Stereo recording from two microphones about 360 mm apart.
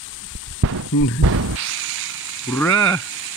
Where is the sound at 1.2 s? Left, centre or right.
Right.